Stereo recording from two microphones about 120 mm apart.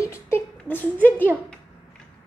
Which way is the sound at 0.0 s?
20° left (ahead or behind).